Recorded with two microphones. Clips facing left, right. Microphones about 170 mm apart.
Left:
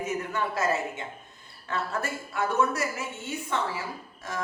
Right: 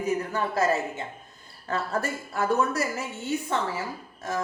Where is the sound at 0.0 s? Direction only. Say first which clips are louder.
Right 3 dB; 35° right (ahead or behind).